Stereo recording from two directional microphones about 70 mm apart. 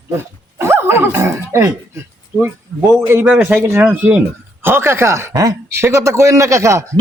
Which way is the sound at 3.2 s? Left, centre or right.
Right.